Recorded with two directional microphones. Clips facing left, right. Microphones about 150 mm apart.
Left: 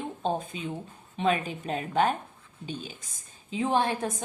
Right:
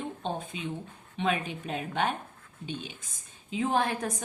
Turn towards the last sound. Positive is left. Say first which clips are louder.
# left 2 dB
turn(degrees=30)  # may be behind; listen again after turning